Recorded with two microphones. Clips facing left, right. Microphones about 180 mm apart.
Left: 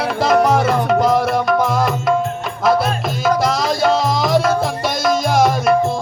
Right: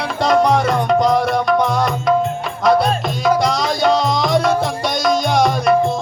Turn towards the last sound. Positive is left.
turn(degrees=0)  # may be behind; listen again after turning